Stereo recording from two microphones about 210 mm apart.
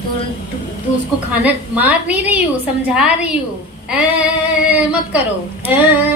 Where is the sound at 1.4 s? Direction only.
5° right (ahead or behind).